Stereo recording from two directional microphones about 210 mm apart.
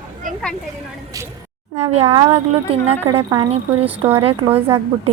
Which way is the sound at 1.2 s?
15° right (ahead or behind).